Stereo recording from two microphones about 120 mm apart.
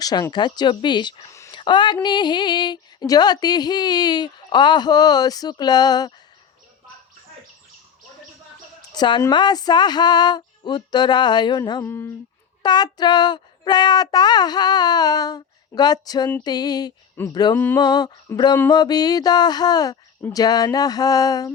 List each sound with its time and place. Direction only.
0.0 s speech: 35° left (ahead or behind)
1.3 s a sound: 25° left (ahead or behind)
1.5 s speech: 40° left (ahead or behind)
8.9 s a woman's voice: 40° left (ahead or behind)
11.8 s speech: 20° left (ahead or behind)
12.6 s speech: 35° left (ahead or behind)